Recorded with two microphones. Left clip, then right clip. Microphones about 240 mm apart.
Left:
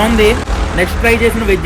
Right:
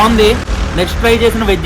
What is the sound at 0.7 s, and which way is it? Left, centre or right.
Speech, centre.